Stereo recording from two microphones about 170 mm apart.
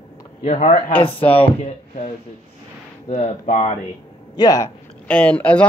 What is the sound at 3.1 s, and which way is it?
Speech, 45° left (ahead or behind).